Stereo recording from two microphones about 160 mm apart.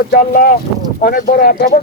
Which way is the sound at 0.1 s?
75° left (ahead or behind).